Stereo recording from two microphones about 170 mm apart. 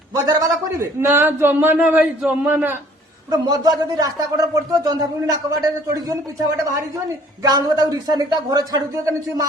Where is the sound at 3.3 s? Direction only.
20° right (ahead or behind).